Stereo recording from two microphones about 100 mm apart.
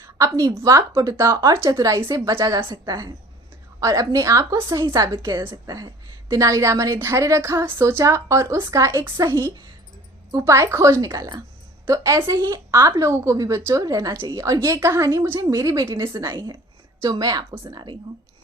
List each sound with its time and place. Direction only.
0.0 s a sound: 35° right (ahead or behind)
0.6 s a woman's voice: 35° right (ahead or behind)
16.2 s a woman's voice: 45° right (ahead or behind)